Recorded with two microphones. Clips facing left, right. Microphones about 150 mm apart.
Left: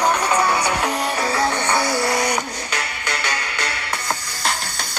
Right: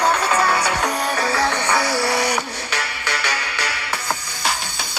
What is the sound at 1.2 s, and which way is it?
Music, 20° left (ahead or behind).